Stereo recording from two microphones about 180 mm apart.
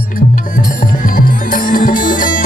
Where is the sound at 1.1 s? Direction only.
50° left (ahead or behind).